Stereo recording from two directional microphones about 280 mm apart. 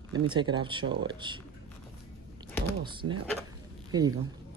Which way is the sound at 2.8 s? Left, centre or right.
Centre.